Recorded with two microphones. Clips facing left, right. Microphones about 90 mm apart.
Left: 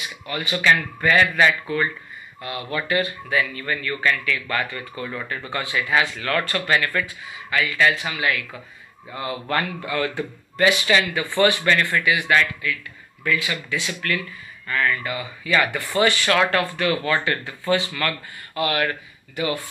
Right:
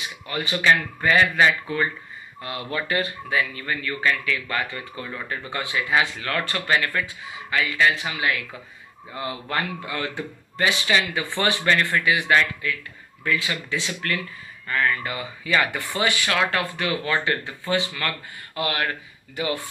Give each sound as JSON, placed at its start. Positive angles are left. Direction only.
{"t": 0.3, "sound": "speech", "side_deg": -30}
{"t": 9.5, "sound": "speech", "side_deg": -15}